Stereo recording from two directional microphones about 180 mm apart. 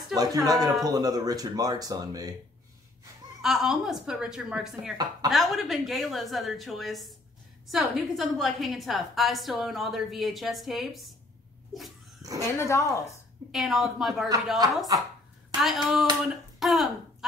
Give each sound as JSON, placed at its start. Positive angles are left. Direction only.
{"t": 0.1, "sound": "speech", "side_deg": -20}
{"t": 3.4, "sound": "a woman's voice", "side_deg": 0}
{"t": 12.2, "sound": "speech", "side_deg": -20}
{"t": 12.5, "sound": "speech", "side_deg": 15}
{"t": 13.5, "sound": "a woman's voice", "side_deg": 0}
{"t": 14.6, "sound": "speech", "side_deg": -20}
{"t": 15.5, "sound": "a woman's voice", "side_deg": 0}
{"t": 16.5, "sound": "a sound", "side_deg": 0}